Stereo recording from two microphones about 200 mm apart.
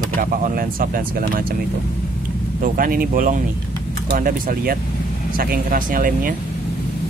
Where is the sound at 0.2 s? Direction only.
45° right (ahead or behind).